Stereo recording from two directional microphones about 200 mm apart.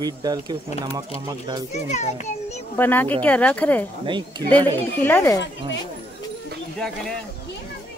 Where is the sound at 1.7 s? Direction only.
35° left (ahead or behind).